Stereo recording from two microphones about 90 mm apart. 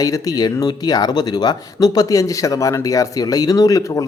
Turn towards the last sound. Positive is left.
turn(degrees=40)  # may be behind; listen again after turning